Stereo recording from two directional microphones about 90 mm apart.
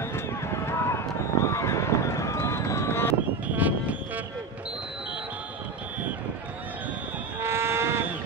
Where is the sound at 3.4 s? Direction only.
15° right (ahead or behind).